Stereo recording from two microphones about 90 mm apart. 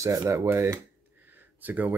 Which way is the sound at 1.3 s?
20° right (ahead or behind).